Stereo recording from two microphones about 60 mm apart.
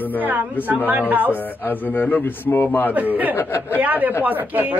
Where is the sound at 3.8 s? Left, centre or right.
Right.